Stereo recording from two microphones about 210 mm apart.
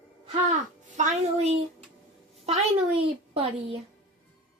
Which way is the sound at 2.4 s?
30° right (ahead or behind).